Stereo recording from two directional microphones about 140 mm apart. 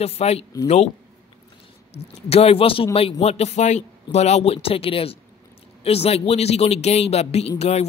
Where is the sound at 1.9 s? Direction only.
45° left (ahead or behind).